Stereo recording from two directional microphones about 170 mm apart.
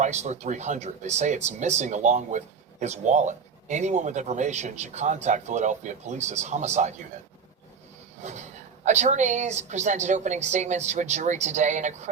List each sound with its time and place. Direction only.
0.0 s speech: 45° right (ahead or behind)
8.2 s speech: 45° right (ahead or behind)